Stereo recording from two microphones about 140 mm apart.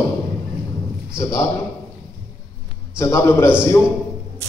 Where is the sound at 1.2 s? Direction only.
20° left (ahead or behind).